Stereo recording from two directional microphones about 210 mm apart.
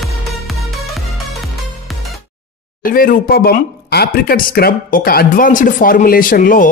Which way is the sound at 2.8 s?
40° left (ahead or behind).